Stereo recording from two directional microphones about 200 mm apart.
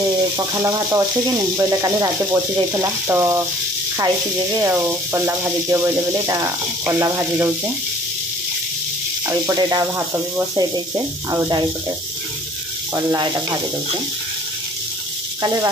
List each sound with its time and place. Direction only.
0.0 s frying: 15° right (ahead or behind)
1.6 s speech: 15° right (ahead or behind)
4.6 s speech: 15° right (ahead or behind)
9.3 s speech: 15° right (ahead or behind)
12.9 s speech: 15° right (ahead or behind)
15.4 s speech: 15° right (ahead or behind)